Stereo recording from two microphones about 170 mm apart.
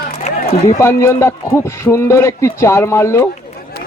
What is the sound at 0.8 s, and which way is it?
A man's voice, 15° left (ahead or behind).